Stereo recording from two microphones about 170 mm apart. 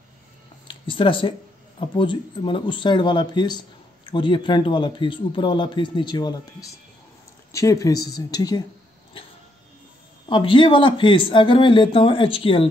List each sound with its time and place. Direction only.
0.7 s speech: 30° left (ahead or behind)
10.2 s speech: 30° left (ahead or behind)